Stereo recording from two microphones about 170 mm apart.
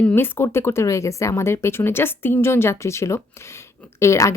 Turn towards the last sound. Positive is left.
turn(degrees=15)  # may be behind; listen again after turning